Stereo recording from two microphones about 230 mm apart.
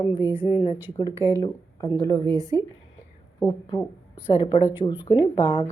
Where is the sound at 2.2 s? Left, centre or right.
Centre.